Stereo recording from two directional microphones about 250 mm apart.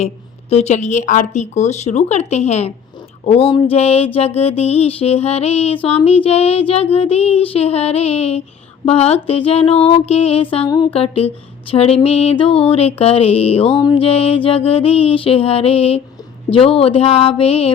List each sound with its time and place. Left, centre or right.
0.5 s music: left